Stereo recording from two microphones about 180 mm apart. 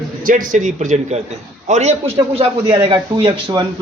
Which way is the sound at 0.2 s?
50° right (ahead or behind).